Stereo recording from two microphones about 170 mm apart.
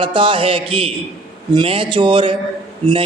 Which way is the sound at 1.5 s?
30° right (ahead or behind).